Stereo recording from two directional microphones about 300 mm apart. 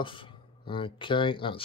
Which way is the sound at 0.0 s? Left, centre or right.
Centre.